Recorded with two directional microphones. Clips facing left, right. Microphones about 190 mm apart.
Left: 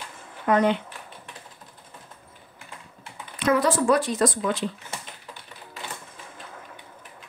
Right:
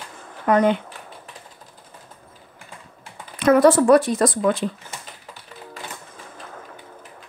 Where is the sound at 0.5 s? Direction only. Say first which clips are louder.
Right 3 dB; 50° right (ahead or behind).